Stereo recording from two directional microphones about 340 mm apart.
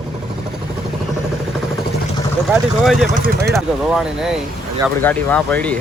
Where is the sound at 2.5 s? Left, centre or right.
Centre.